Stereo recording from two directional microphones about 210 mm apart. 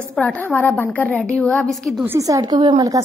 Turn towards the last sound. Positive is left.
turn(degrees=-15)  # may be behind; listen again after turning